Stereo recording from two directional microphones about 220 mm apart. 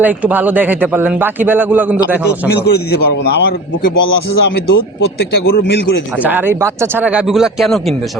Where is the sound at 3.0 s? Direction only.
45° left (ahead or behind).